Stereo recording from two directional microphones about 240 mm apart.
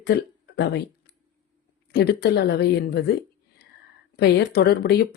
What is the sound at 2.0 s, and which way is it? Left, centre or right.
Speech, left.